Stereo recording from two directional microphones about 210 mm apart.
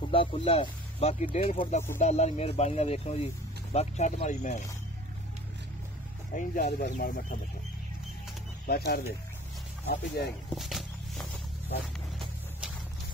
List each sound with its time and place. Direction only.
0.1 s speech: 25° left (ahead or behind)
6.3 s speech: 40° left (ahead or behind)
8.6 s speech: 50° left (ahead or behind)
10.2 s speech: 50° left (ahead or behind)
10.5 s a sound: centre (ahead or behind)
12.2 s music: 5° right (ahead or behind)